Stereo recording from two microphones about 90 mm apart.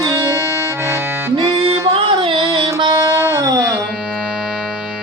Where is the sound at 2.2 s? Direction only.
65° right (ahead or behind).